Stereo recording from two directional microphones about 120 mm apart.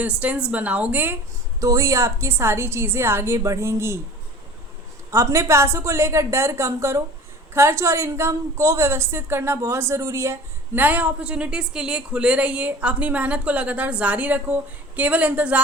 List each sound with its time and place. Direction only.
0.0 s speech: 10° right (ahead or behind)
1.6 s a woman's voice: 25° right (ahead or behind)
5.1 s a woman's voice: 25° right (ahead or behind)